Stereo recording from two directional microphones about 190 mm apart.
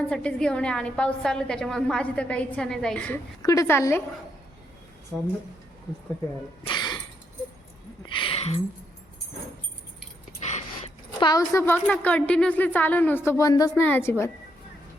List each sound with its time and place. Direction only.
0.0 s a woman's voice: 5° left (ahead or behind)
3.4 s speech: 15° left (ahead or behind)
6.7 s a sound: 25° left (ahead or behind)
8.0 s a sound: 25° left (ahead or behind)
10.4 s dog: 35° left (ahead or behind)
11.2 s speech: 20° left (ahead or behind)